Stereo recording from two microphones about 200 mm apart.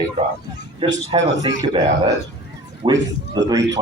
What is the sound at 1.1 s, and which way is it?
A man's voice, 25° right (ahead or behind).